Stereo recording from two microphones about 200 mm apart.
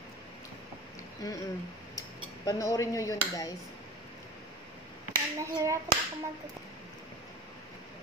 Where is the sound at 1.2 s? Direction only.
20° left (ahead or behind).